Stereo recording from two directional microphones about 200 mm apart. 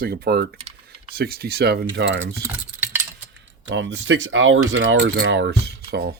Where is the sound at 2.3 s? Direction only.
10° right (ahead or behind).